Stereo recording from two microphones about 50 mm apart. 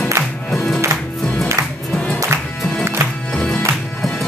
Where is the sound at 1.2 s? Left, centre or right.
Left.